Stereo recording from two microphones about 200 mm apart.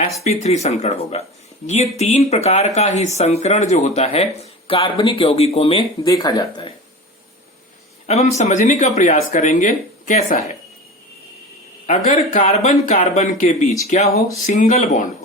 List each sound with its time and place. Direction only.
0.3 s speech: 35° left (ahead or behind)
8.0 s speech: 35° left (ahead or behind)
11.9 s speech: 40° left (ahead or behind)